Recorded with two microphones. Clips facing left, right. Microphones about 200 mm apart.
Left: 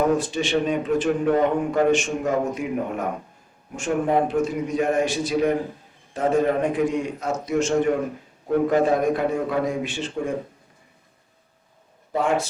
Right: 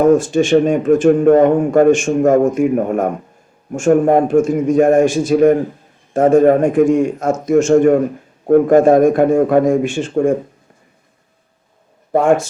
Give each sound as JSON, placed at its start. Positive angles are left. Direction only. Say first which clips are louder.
{"t": 0.0, "sound": "speech", "louder": "right 10 dB", "side_deg": -45}
{"t": 12.1, "sound": "speech", "louder": "right 9 dB", "side_deg": -50}